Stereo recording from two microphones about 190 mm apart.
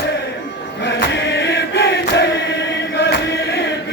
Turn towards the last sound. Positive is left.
turn(degrees=65)  # may be behind; listen again after turning